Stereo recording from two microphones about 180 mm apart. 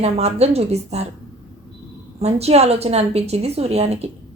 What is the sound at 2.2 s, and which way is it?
A woman's voice, 35° right (ahead or behind).